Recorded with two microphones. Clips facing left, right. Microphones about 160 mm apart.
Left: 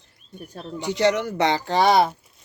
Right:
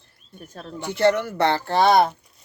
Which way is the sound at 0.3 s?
10° left (ahead or behind).